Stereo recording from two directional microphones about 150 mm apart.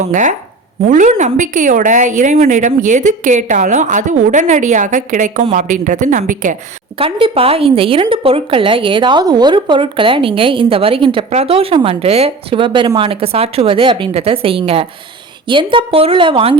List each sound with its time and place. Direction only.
0.1 s a woman's voice: 55° right (ahead or behind)
7.0 s a woman's voice: 40° right (ahead or behind)